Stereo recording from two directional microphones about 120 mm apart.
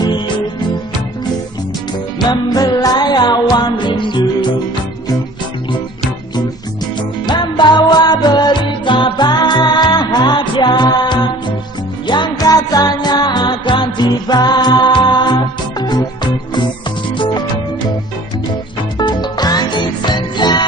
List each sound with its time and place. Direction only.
2.1 s music: 35° left (ahead or behind)
7.0 s music: 40° left (ahead or behind)
18.9 s music: 35° left (ahead or behind)